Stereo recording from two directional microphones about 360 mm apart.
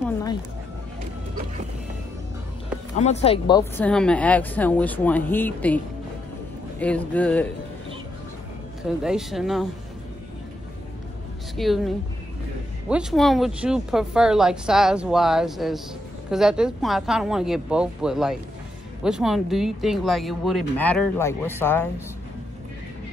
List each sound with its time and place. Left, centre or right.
0.0 s music: centre
3.0 s speech: centre
6.8 s speech: centre
8.8 s speech: centre
11.5 s speech: centre